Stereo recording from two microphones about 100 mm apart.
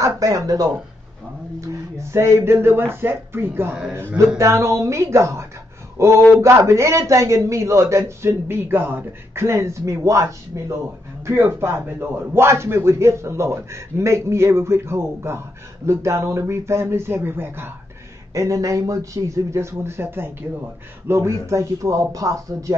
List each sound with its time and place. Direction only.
0.0 s speech: 35° right (ahead or behind)
2.0 s a man's voice: 30° right (ahead or behind)
18.3 s speech: 30° right (ahead or behind)